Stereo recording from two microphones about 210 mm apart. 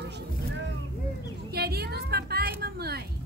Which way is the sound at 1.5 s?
50° right (ahead or behind).